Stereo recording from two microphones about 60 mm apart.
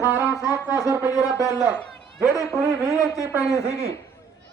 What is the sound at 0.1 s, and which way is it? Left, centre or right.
Music, right.